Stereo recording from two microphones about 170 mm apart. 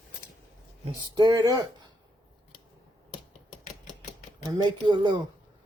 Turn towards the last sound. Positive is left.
turn(degrees=-25)  # may be behind; listen again after turning